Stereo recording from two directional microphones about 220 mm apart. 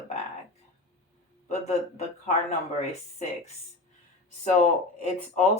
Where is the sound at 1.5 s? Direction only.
30° left (ahead or behind).